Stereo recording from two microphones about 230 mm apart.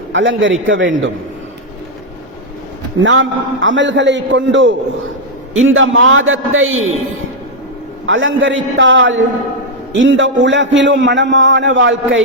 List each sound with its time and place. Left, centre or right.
0.1 s a man's voice: right
3.0 s a man's voice: right
8.0 s a man's voice: right